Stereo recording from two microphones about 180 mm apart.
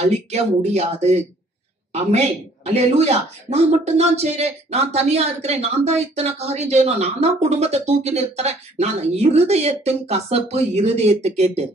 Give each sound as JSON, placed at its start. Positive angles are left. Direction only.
{"t": 0.0, "sound": "speech", "side_deg": -35}